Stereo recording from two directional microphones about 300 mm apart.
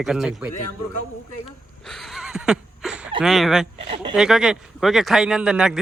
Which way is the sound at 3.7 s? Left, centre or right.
Centre.